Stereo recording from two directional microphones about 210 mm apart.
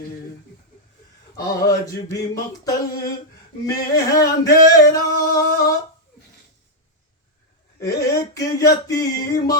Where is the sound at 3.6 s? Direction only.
15° left (ahead or behind).